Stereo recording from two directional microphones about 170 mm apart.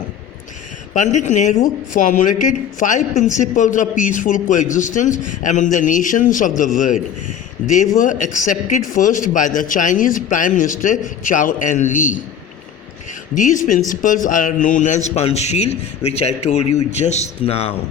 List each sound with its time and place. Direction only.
0.9 s speech: 45° left (ahead or behind)
13.3 s a man's voice: 50° left (ahead or behind)